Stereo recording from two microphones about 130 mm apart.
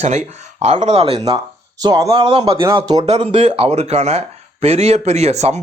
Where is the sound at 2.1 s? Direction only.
45° right (ahead or behind).